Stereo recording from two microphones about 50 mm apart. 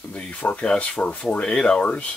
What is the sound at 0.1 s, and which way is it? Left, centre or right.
Speech, left.